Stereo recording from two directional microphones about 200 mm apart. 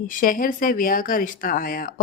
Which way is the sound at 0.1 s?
45° left (ahead or behind).